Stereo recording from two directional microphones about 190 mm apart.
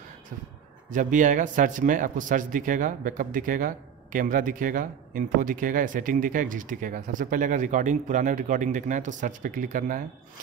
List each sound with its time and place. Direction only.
0.8 s a man's voice: 45° right (ahead or behind)